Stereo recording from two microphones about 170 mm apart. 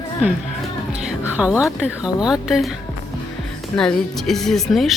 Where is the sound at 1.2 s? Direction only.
10° right (ahead or behind).